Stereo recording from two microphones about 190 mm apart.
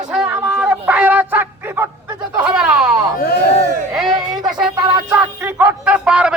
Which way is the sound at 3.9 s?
Centre (ahead or behind).